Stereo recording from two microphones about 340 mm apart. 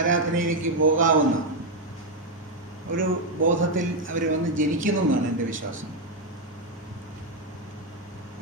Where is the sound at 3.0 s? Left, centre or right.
Right.